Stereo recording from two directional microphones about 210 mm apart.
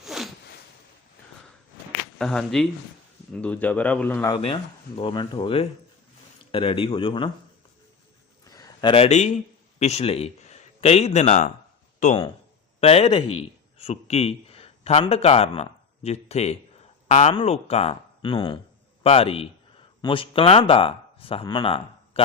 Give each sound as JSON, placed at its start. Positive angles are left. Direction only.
{"t": 0.0, "sound": "a sound", "side_deg": 0}
{"t": 2.1, "sound": "a man's voice", "side_deg": 0}
{"t": 4.4, "sound": "speech", "side_deg": 25}
{"t": 8.4, "sound": "a man's voice", "side_deg": 20}